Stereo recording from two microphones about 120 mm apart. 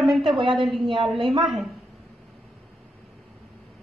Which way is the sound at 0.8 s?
45° right (ahead or behind).